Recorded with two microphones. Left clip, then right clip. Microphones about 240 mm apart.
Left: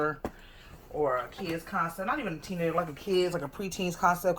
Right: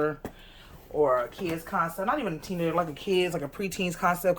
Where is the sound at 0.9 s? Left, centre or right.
Centre.